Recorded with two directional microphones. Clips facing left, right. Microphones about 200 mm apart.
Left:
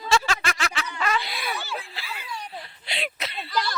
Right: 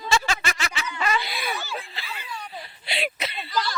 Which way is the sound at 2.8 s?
5° right (ahead or behind).